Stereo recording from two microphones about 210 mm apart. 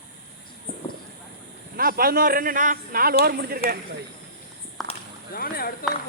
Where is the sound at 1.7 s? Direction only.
45° right (ahead or behind).